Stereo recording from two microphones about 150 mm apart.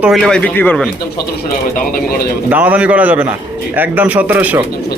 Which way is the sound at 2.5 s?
10° right (ahead or behind).